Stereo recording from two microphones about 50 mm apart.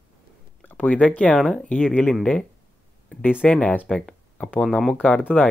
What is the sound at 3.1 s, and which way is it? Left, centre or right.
Speech, left.